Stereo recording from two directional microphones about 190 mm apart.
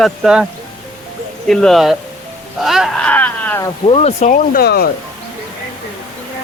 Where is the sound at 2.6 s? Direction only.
Centre (ahead or behind).